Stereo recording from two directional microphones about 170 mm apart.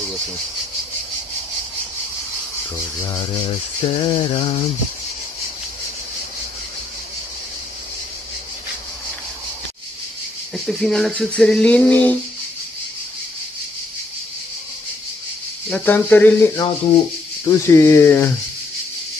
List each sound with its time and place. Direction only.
3.1 s speech: 20° left (ahead or behind)
10.5 s a sound: centre (ahead or behind)
15.7 s speech: 10° left (ahead or behind)